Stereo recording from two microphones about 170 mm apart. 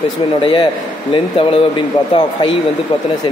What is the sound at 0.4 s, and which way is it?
Speech, 30° left (ahead or behind).